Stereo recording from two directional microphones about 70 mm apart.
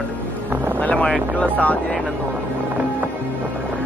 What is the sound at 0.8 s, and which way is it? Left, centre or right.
Speech, centre.